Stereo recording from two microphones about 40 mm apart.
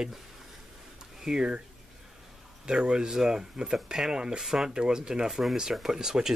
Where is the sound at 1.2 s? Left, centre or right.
Centre.